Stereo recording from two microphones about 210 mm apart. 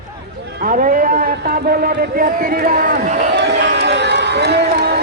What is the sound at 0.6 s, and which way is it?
Speech, 40° right (ahead or behind).